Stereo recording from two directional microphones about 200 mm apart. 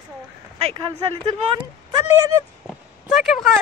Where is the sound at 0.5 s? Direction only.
30° right (ahead or behind).